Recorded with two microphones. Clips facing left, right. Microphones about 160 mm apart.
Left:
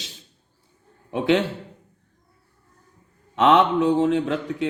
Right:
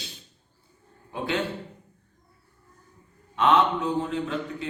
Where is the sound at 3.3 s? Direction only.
80° left.